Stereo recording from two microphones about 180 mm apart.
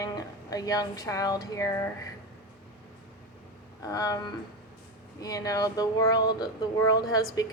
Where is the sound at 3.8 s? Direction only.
20° left (ahead or behind).